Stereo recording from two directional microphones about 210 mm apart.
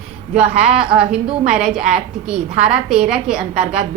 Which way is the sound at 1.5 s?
5° right (ahead or behind).